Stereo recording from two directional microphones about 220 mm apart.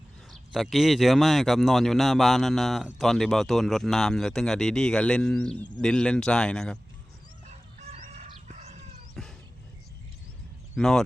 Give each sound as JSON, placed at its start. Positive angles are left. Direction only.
{"t": 0.5, "sound": "speech", "side_deg": 0}
{"t": 7.4, "sound": "chicken", "side_deg": -30}
{"t": 9.2, "sound": "a sound", "side_deg": 0}
{"t": 10.8, "sound": "speech", "side_deg": 0}